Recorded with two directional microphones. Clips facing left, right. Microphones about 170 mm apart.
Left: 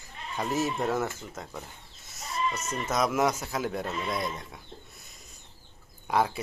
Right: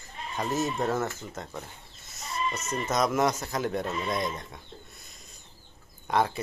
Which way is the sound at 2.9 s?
5° left (ahead or behind).